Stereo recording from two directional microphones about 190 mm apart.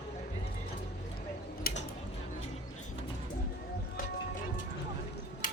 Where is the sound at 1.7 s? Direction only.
50° left (ahead or behind).